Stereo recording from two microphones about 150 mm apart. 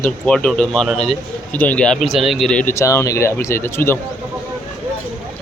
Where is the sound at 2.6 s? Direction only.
20° left (ahead or behind).